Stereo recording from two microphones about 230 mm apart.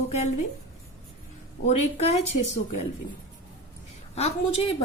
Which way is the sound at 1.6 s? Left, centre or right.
Left.